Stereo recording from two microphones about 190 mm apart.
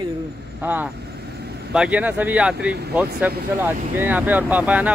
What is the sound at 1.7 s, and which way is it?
Speech, 5° right (ahead or behind).